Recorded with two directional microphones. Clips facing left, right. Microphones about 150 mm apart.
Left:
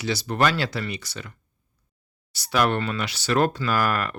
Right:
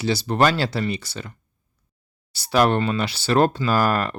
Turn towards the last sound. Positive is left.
turn(degrees=-30)  # may be behind; listen again after turning